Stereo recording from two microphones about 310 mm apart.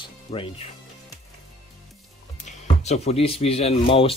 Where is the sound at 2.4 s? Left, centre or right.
Left.